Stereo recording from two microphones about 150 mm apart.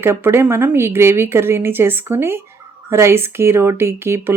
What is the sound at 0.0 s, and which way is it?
Speech, 15° right (ahead or behind).